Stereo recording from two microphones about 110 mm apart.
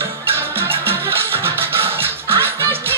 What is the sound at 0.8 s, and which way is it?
Music, 20° right (ahead or behind).